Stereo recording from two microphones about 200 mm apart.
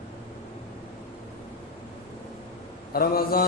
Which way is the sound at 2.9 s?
50° left (ahead or behind).